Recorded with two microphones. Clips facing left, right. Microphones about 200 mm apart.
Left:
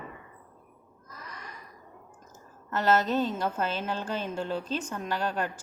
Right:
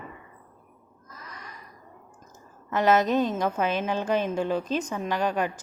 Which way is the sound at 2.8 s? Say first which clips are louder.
Right 3 dB; 15° right (ahead or behind).